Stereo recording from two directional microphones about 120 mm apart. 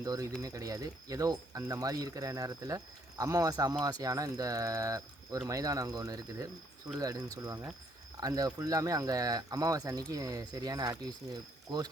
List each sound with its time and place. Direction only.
0.0 s speech: 30° right (ahead or behind)